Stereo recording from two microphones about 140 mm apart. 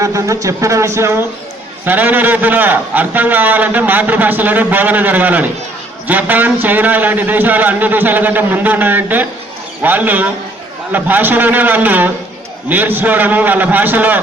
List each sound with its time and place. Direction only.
0.0 s a man's voice: 20° right (ahead or behind)